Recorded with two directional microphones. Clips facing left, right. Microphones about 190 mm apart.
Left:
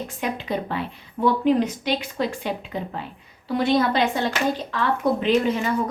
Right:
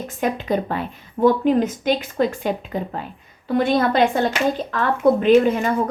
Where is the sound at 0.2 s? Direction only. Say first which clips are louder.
Right 6 dB; 45° right (ahead or behind).